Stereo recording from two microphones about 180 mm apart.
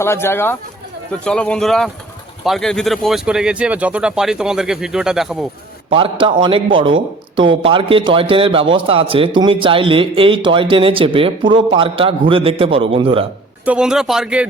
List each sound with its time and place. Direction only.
0.0 s speech: 15° left (ahead or behind); by 5.5 s centre (ahead or behind)
5.9 s a man's voice: 30° right (ahead or behind)
7.3 s a man's voice: 25° right (ahead or behind)
13.7 s speech: 5° right (ahead or behind)